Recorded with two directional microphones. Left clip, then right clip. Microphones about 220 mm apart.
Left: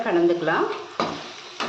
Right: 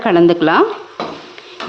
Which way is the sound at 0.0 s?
50° right (ahead or behind).